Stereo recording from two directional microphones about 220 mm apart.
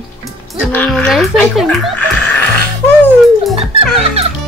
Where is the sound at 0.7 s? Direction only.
5° left (ahead or behind).